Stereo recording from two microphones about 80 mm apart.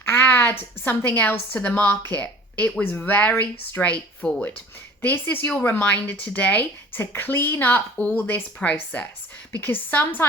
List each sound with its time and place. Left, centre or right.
0.0 s a woman's voice: left
3.8 s a woman's voice: centre